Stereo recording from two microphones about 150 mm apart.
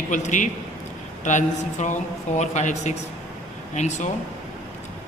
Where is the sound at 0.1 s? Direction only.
55° left (ahead or behind).